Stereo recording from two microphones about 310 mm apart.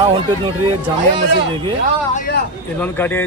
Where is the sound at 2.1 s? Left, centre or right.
Left.